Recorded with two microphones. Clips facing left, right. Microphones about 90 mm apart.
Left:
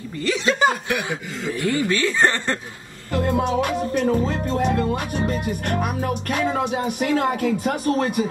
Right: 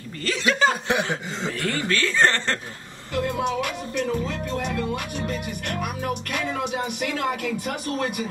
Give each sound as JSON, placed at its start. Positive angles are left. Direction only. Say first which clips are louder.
{"t": 0.3, "sound": "speech", "louder": "left 2 dB", "side_deg": 20}
{"t": 0.8, "sound": "chuckle", "louder": "right 1 dB", "side_deg": -25}
{"t": 1.6, "sound": "speech", "louder": "left 5 dB", "side_deg": 20}
{"t": 3.1, "sound": "music", "louder": "left 4 dB", "side_deg": 40}
{"t": 6.3, "sound": "speech", "louder": "left 7 dB", "side_deg": 35}